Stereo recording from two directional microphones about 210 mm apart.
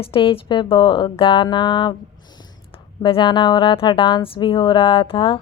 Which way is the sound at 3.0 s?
25° left (ahead or behind).